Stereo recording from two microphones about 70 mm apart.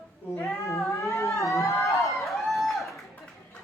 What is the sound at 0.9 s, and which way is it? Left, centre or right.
Cat, left.